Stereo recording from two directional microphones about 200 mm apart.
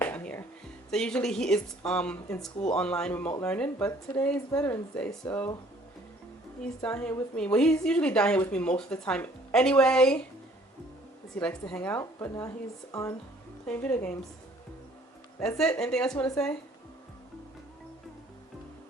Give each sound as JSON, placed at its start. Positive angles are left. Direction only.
{"t": 0.0, "sound": "music", "side_deg": 10}
{"t": 0.9, "sound": "a woman's voice", "side_deg": 5}
{"t": 5.2, "sound": "speech", "side_deg": 20}
{"t": 6.6, "sound": "a woman's voice", "side_deg": 5}
{"t": 11.3, "sound": "a woman's voice", "side_deg": 5}
{"t": 15.4, "sound": "a woman's voice", "side_deg": 5}